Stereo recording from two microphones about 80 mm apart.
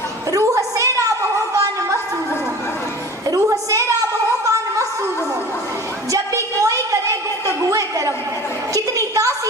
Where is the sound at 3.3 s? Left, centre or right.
Right.